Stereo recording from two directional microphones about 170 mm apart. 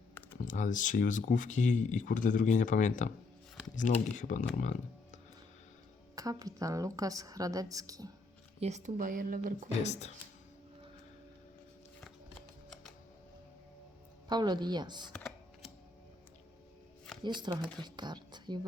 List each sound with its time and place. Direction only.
0.3 s speech: 50° left (ahead or behind)
6.1 s a woman's voice: 20° right (ahead or behind)
8.6 s speech: 45° right (ahead or behind)
9.8 s speech: 40° left (ahead or behind)
11.9 s shuffling cards: 5° left (ahead or behind)
14.3 s a woman's voice: 25° right (ahead or behind)
17.2 s a woman's voice: 25° right (ahead or behind)